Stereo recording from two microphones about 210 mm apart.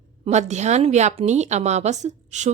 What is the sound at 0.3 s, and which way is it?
A woman's voice, 35° right (ahead or behind).